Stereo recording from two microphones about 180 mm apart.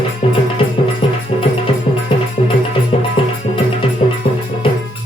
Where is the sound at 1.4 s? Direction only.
30° left (ahead or behind).